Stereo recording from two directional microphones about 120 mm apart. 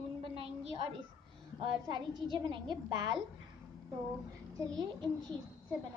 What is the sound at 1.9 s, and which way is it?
A woman's voice, 40° right (ahead or behind).